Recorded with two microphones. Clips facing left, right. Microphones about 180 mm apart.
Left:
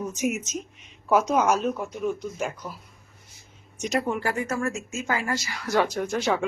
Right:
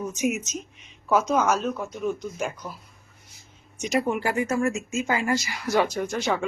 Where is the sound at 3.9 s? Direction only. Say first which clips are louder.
Right 2 dB; 10° right (ahead or behind).